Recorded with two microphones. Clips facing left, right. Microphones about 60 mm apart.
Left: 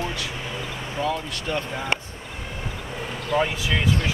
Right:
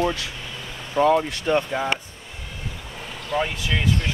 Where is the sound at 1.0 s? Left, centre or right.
Right.